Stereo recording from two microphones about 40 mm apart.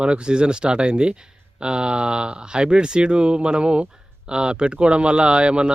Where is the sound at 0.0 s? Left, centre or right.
Right.